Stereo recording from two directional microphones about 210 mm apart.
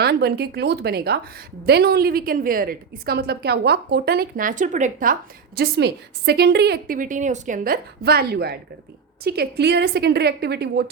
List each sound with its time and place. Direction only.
0.0 s a woman's voice: 50° right (ahead or behind)
5.5 s a woman's voice: 50° right (ahead or behind)